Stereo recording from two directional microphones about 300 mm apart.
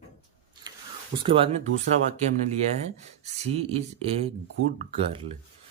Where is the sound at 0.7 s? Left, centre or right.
Centre.